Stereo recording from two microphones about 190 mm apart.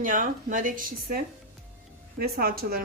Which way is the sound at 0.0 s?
45° right (ahead or behind).